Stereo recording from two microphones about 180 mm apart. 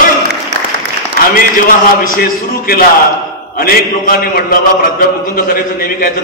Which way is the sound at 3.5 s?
55° left (ahead or behind).